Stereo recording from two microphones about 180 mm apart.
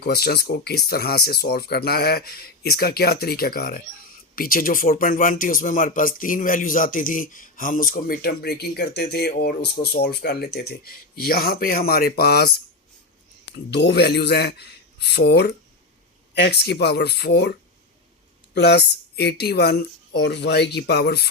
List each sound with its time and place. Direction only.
0.0 s speech: 60° left (ahead or behind)
13.7 s speech: 70° left (ahead or behind)